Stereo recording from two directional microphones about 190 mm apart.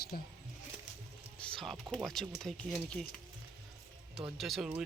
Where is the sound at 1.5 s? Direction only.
Centre (ahead or behind).